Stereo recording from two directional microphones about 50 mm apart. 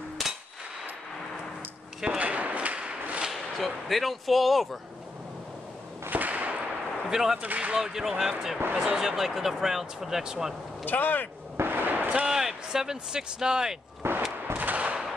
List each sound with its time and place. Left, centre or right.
2.0 s thump: right
3.3 s whip: centre
6.0 s whip: right
7.1 s a man's voice: centre
7.4 s speech: right
7.8 s speech: centre
10.9 s speech: left
11.5 s artillery fire: right
12.3 s speech: centre
14.0 s a sound: right
14.5 s gunshot: right